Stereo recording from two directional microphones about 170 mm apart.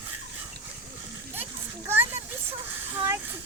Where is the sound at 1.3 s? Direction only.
10° right (ahead or behind).